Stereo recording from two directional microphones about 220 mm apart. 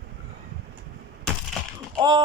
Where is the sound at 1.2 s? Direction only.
Centre (ahead or behind).